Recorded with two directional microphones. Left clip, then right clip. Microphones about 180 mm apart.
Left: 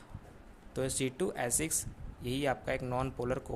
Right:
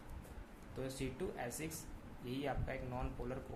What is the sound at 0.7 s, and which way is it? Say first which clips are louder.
Speech: left 10 dB; 60° left (ahead or behind).